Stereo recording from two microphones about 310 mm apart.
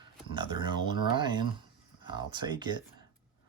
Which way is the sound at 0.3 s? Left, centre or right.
Centre.